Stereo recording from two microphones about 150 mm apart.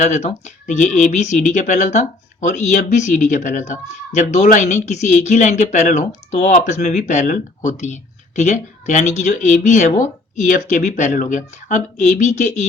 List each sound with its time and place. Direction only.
0.0 s speech: 50° left (ahead or behind)